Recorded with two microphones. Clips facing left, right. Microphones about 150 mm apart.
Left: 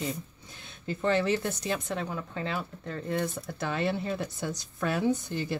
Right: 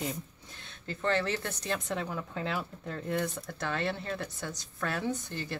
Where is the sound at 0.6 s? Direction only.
10° left (ahead or behind).